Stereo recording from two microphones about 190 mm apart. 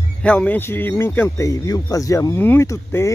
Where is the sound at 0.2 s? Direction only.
5° left (ahead or behind).